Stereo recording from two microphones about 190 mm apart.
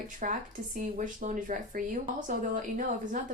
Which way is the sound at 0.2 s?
45° right (ahead or behind).